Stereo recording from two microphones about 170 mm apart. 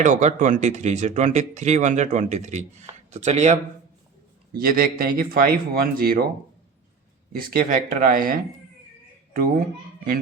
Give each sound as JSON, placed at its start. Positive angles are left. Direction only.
{"t": 0.0, "sound": "speech", "side_deg": -45}
{"t": 4.5, "sound": "speech", "side_deg": -60}
{"t": 7.3, "sound": "speech", "side_deg": -55}